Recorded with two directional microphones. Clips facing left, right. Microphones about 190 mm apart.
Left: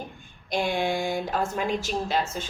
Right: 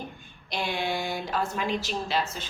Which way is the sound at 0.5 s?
45° left (ahead or behind).